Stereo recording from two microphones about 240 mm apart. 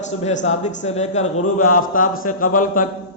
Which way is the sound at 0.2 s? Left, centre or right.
Left.